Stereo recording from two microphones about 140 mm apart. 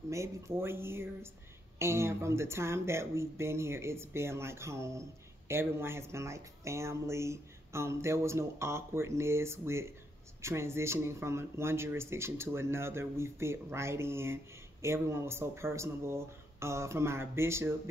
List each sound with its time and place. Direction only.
0.1 s speech: 20° right (ahead or behind)